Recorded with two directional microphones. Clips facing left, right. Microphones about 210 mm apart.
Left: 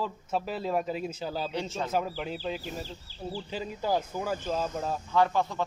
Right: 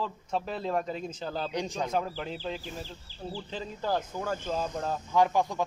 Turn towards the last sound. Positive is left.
turn(degrees=-15)  # may be behind; listen again after turning